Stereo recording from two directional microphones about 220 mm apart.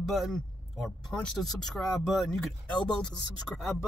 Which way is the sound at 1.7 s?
Centre (ahead or behind).